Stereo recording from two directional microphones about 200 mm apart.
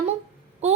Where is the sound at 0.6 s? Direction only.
35° right (ahead or behind).